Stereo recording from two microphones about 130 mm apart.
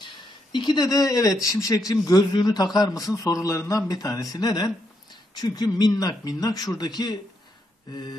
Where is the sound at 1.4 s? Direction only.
25° left (ahead or behind).